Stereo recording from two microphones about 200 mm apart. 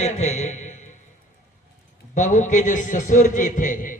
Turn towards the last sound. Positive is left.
turn(degrees=40)  # may be behind; listen again after turning